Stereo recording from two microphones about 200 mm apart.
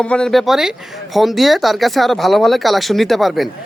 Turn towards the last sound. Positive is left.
turn(degrees=0)  # may be behind; listen again after turning